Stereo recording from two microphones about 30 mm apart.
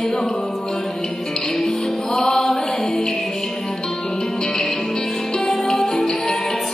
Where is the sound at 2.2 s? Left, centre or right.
Centre.